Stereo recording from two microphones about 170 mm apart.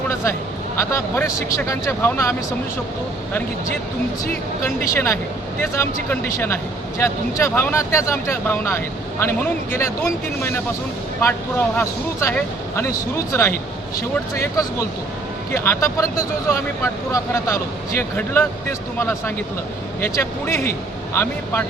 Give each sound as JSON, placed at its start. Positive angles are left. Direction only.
{"t": 0.8, "sound": "speech", "side_deg": 15}
{"t": 4.6, "sound": "speech", "side_deg": 15}